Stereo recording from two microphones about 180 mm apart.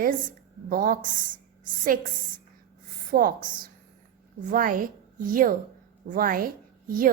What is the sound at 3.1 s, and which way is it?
A woman's voice, 50° right (ahead or behind).